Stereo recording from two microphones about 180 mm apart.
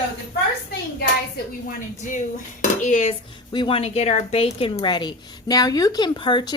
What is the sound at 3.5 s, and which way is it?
Speech, 30° left (ahead or behind).